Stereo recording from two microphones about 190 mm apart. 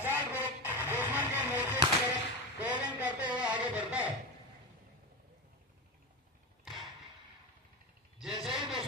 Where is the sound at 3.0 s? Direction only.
10° right (ahead or behind).